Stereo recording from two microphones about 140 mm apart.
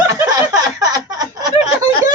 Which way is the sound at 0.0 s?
25° right (ahead or behind).